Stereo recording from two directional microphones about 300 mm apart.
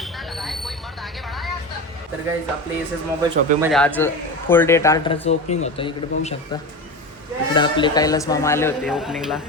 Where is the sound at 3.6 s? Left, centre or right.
Centre.